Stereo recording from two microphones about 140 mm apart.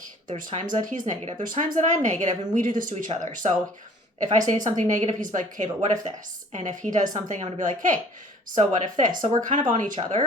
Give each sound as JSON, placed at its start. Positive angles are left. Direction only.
{"t": 0.3, "sound": "speech", "side_deg": -65}
{"t": 1.5, "sound": "speech", "side_deg": -65}
{"t": 2.9, "sound": "a woman's voice", "side_deg": -50}
{"t": 3.2, "sound": "speech", "side_deg": -65}
{"t": 7.3, "sound": "a woman's voice", "side_deg": -50}
{"t": 7.6, "sound": "speech", "side_deg": -65}